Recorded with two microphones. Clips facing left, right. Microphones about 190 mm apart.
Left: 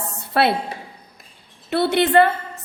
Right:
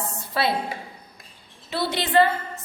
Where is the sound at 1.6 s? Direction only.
60° left (ahead or behind).